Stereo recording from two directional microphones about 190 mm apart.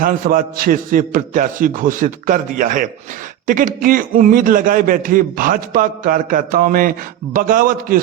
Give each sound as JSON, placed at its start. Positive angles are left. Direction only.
{"t": 0.0, "sound": "a man's voice", "side_deg": -45}